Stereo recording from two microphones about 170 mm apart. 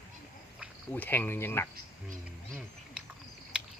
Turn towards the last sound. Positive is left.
turn(degrees=-5)  # may be behind; listen again after turning